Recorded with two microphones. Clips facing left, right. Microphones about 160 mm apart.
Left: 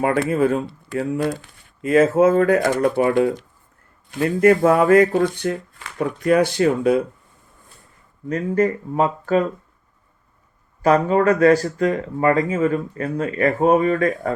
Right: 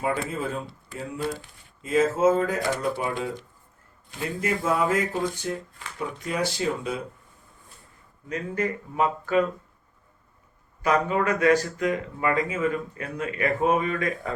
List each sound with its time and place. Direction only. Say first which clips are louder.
0.0 s speech: left 9 dB; 70° left (ahead or behind)
8.3 s speech: left 9 dB; 40° left (ahead or behind)
10.8 s speech: left 7 dB; 40° left (ahead or behind)